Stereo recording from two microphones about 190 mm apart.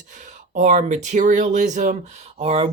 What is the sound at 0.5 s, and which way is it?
Speech, 40° right (ahead or behind).